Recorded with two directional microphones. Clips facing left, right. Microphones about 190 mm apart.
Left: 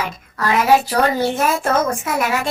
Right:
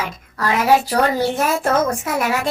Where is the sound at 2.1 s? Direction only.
35° right (ahead or behind).